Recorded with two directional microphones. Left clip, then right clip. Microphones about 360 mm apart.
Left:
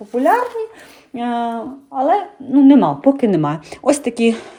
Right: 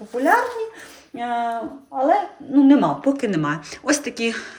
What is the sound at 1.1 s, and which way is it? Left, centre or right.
Speech, centre.